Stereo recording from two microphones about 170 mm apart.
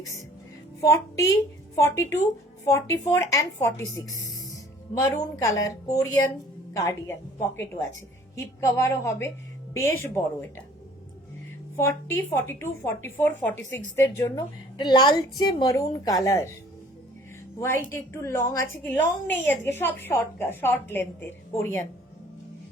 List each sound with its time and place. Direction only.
0.8 s a woman's voice: 20° left (ahead or behind)
8.4 s a woman's voice: 15° left (ahead or behind)
11.8 s a woman's voice: 10° left (ahead or behind)
17.6 s a woman's voice: 15° left (ahead or behind)